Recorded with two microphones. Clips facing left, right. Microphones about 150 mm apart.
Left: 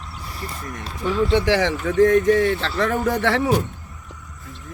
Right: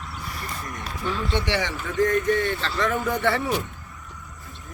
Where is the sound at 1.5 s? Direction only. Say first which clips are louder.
Left 7 dB; 90° left.